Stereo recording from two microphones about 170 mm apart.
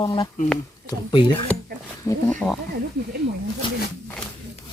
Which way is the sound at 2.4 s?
10° right (ahead or behind).